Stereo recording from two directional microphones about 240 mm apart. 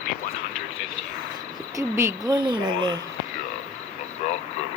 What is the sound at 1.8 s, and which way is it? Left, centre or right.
Speech, centre.